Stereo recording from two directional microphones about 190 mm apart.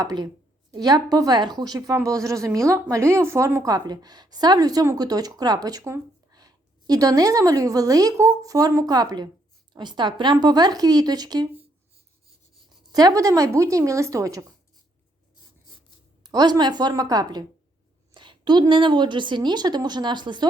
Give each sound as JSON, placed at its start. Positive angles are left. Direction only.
{"t": 0.0, "sound": "a woman's voice", "side_deg": -20}
{"t": 12.9, "sound": "speech", "side_deg": -20}
{"t": 16.2, "sound": "a woman's voice", "side_deg": -20}